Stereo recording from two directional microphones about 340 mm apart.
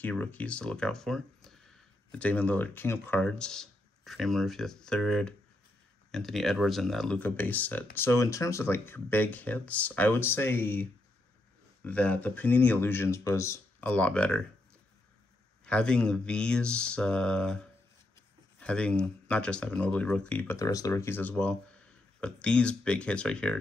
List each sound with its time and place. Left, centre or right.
0.0 s speech: centre
15.6 s speech: centre
18.6 s speech: centre